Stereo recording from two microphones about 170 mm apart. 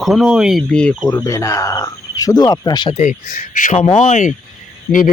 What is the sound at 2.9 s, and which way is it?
Speech, 45° left (ahead or behind).